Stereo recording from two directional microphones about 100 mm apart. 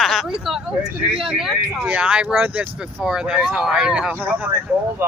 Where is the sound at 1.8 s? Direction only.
15° right (ahead or behind).